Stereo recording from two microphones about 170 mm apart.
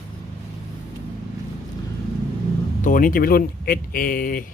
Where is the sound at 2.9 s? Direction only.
55° left (ahead or behind).